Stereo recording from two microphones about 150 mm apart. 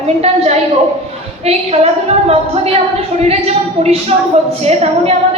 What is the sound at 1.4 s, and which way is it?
A woman's voice, 45° right (ahead or behind).